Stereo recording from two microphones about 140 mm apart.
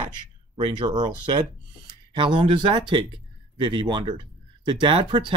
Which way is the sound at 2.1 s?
40° right (ahead or behind).